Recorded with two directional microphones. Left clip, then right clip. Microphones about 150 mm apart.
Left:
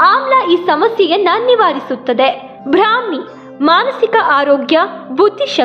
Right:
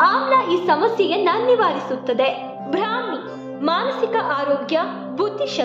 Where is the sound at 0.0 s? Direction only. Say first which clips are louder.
Left 6 dB; 35° left (ahead or behind).